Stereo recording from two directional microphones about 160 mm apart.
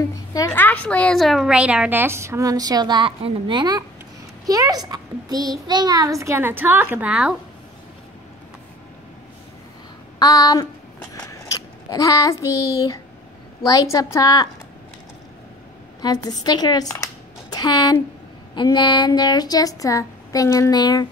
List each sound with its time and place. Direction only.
0.5 s a woman's voice: 10° left (ahead or behind); by 7.3 s 5° right (ahead or behind)
10.1 s speech: 25° left (ahead or behind)
11.4 s a sound: 20° left (ahead or behind)
13.7 s speech: 20° left (ahead or behind)
16.0 s speech: 25° left (ahead or behind)